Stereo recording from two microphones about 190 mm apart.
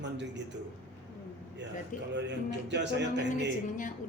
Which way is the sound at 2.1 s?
65° right (ahead or behind).